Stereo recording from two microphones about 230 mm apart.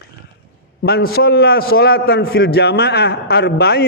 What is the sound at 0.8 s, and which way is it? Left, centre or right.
A man's voice, left.